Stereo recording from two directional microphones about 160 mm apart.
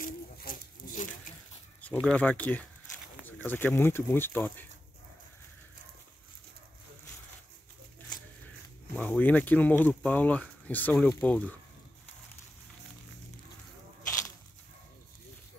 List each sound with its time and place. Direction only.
0.0 s a sound: 60° left (ahead or behind)
2.0 s speech: 10° left (ahead or behind)
8.9 s speech: 10° left (ahead or behind)